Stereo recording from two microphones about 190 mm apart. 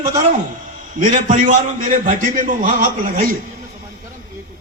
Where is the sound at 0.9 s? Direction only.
45° right (ahead or behind).